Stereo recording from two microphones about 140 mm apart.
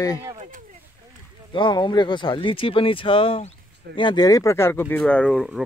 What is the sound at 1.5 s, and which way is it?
Speech, 35° left (ahead or behind).